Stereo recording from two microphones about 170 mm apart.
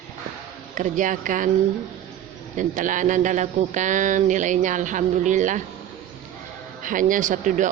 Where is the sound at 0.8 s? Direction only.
50° right (ahead or behind).